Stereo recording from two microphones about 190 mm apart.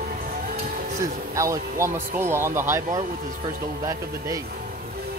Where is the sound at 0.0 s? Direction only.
50° right (ahead or behind).